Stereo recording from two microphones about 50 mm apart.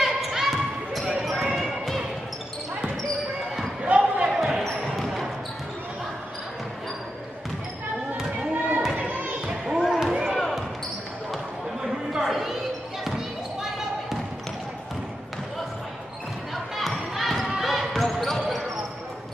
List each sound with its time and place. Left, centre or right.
0.0 s basketball bounce: centre
3.8 s basketball bounce: right
4.3 s basketball bounce: centre
8.4 s basketball bounce: right
8.9 s music: right
9.8 s basketball bounce: centre
11.8 s chatter: centre
16.7 s a sound: centre
17.6 s basketball bounce: centre